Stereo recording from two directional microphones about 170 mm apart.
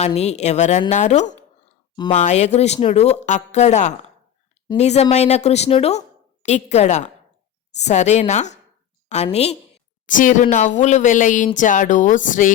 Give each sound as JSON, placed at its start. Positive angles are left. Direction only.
{"t": 0.0, "sound": "speech", "side_deg": 40}
{"t": 10.1, "sound": "speech", "side_deg": 50}